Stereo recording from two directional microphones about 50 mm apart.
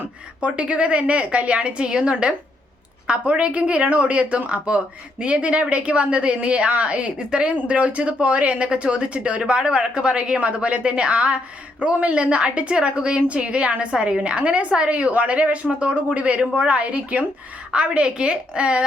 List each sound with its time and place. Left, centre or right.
0.4 s speech: right